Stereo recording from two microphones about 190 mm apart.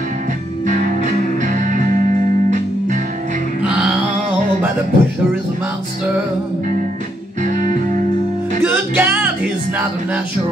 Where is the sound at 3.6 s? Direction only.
5° right (ahead or behind).